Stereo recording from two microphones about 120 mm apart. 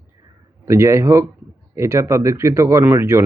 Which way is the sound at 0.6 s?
25° right (ahead or behind).